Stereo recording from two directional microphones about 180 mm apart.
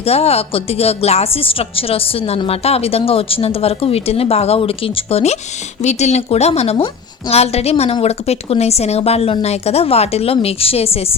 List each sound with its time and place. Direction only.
0.0 s a woman's voice: 35° left (ahead or behind)